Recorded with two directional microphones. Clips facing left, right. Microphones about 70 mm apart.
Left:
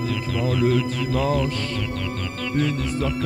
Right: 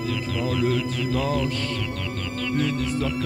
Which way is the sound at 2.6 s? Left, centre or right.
Left.